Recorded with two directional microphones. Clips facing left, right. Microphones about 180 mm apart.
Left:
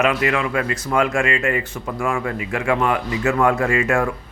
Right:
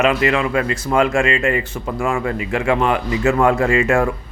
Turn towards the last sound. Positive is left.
turn(degrees=-25)  # may be behind; listen again after turning